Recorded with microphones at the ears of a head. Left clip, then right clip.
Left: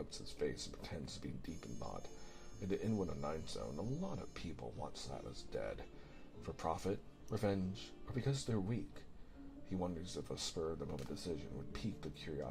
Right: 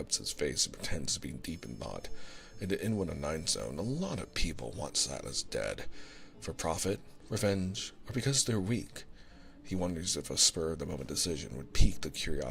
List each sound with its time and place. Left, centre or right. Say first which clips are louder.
0.0 s speech: right 8 dB; right